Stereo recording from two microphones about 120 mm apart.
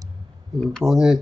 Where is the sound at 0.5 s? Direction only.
5° right (ahead or behind).